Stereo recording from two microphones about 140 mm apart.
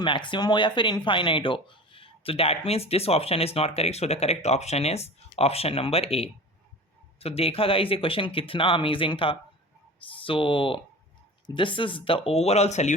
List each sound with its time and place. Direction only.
0.0 s speech: 35° left (ahead or behind); by 12.9 s 55° left (ahead or behind)